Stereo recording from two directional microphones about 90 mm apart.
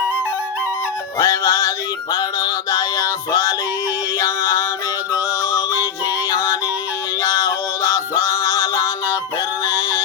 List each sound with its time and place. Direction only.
1.2 s music: 35° left (ahead or behind)
6.3 s yodeling: 35° left (ahead or behind)
7.2 s male singing: 35° left (ahead or behind)